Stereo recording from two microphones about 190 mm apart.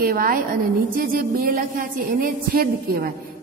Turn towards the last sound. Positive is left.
turn(degrees=-50)  # may be behind; listen again after turning